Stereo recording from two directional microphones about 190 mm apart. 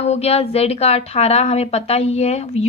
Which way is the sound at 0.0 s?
35° left (ahead or behind).